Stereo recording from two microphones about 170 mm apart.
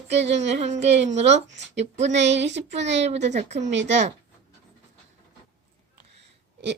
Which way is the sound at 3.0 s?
40° right (ahead or behind).